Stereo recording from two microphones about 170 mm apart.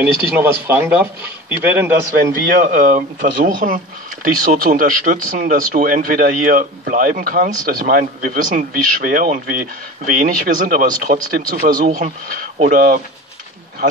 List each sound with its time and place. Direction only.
0.0 s speech: 10° right (ahead or behind)
2.6 s speech: 50° right (ahead or behind)